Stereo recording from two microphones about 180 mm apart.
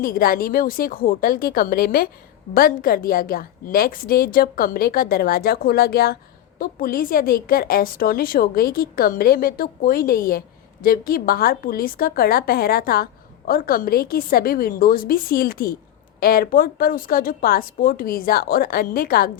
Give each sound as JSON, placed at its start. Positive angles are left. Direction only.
{"t": 0.0, "sound": "a woman's voice", "side_deg": 55}